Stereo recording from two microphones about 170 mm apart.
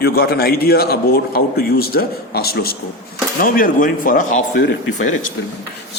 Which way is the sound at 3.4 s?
55° left (ahead or behind).